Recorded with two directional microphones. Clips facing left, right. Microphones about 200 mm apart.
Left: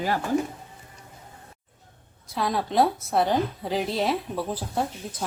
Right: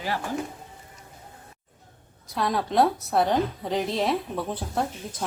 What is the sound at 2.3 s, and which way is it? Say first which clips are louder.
A woman's voice: even; centre (ahead or behind).